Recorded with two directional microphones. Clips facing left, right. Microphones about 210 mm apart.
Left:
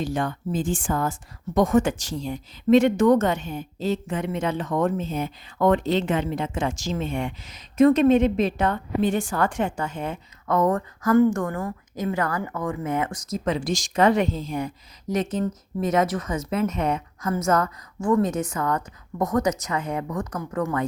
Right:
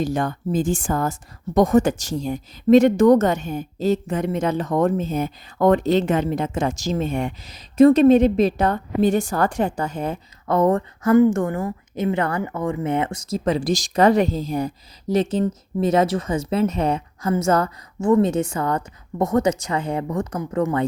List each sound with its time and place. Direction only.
0.0 s speech: 40° right (ahead or behind); by 20.8 s 25° right (ahead or behind)